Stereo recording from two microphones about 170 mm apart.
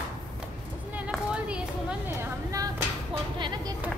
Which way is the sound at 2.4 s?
20° right (ahead or behind).